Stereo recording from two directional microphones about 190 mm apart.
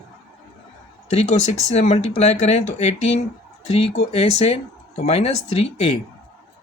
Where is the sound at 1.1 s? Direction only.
35° left (ahead or behind).